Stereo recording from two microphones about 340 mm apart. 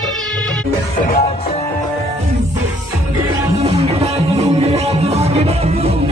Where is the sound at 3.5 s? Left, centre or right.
Centre.